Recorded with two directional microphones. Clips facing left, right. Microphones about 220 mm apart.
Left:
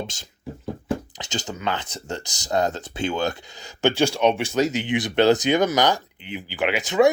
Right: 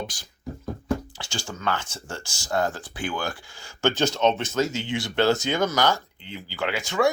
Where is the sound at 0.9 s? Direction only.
20° left (ahead or behind).